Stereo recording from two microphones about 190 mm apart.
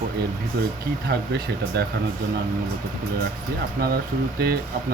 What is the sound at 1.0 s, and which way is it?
Speech, 60° right (ahead or behind).